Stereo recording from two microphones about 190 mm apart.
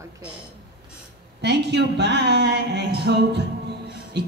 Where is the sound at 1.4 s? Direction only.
60° right (ahead or behind).